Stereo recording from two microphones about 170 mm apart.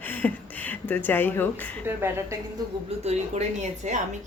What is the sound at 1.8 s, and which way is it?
Speech, 15° right (ahead or behind).